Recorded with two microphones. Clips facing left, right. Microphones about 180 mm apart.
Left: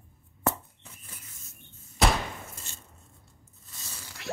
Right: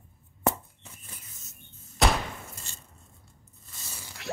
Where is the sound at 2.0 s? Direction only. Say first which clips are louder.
Even; centre (ahead or behind).